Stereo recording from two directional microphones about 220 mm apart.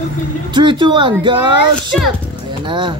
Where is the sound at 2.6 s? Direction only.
20° right (ahead or behind).